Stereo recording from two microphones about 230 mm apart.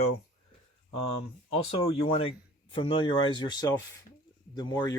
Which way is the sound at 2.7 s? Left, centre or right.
Left.